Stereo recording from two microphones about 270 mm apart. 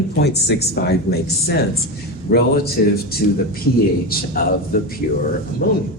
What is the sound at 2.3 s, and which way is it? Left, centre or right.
Speech, left.